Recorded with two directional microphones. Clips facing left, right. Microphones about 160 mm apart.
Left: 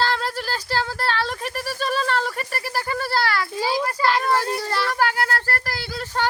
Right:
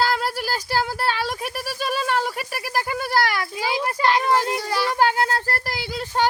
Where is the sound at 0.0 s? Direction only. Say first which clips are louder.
Right 1 dB; 10° right (ahead or behind).